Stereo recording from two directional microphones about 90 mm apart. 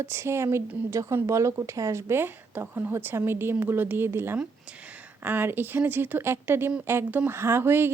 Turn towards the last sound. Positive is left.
turn(degrees=-25)  # may be behind; listen again after turning